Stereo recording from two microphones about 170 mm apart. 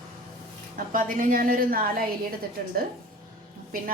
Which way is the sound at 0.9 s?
55° right (ahead or behind).